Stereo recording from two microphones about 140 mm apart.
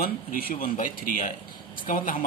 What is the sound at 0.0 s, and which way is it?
A man's voice, 90° left.